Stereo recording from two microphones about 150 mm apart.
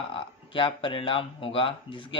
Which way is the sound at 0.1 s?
35° left (ahead or behind).